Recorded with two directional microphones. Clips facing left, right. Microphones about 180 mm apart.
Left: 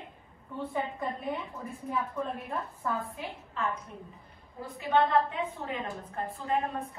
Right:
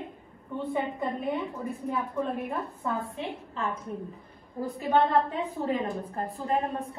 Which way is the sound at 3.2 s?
25° right (ahead or behind).